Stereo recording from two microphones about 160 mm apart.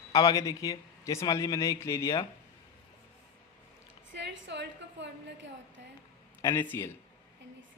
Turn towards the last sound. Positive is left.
turn(degrees=15)  # may be behind; listen again after turning